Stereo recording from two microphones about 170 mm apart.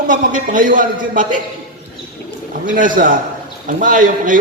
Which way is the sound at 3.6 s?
50° right (ahead or behind).